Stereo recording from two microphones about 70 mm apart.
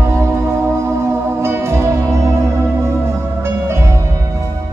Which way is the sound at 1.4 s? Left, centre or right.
Right.